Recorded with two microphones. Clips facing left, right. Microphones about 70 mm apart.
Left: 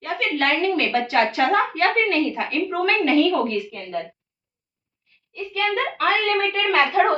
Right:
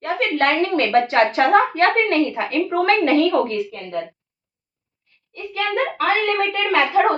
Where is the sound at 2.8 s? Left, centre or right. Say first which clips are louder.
Right 2 dB; right.